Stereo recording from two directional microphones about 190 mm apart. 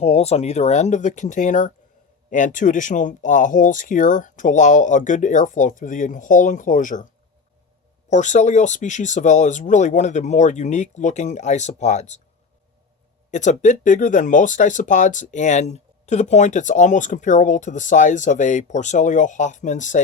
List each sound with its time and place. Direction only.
0.0 s speech: 35° left (ahead or behind)
8.1 s speech: 40° left (ahead or behind)
13.3 s speech: 40° left (ahead or behind)